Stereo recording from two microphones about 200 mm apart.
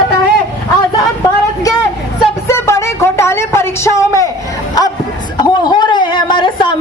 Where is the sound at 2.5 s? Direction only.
15° left (ahead or behind).